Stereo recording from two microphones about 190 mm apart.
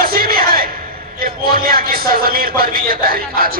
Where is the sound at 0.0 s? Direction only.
50° right (ahead or behind).